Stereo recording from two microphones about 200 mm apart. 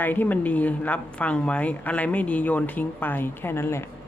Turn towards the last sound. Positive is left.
turn(degrees=10)  # may be behind; listen again after turning